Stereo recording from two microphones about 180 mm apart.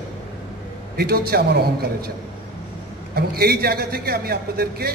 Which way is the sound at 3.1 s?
60° right (ahead or behind).